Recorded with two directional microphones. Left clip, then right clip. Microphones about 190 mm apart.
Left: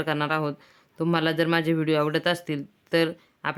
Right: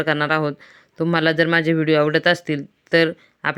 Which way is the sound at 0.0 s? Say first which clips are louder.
Right 6 dB; 20° right (ahead or behind).